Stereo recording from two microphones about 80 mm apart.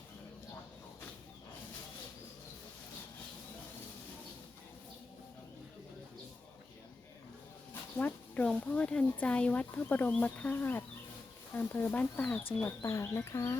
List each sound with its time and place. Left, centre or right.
7.7 s a sound: left
8.6 s speech: centre
12.8 s speech: left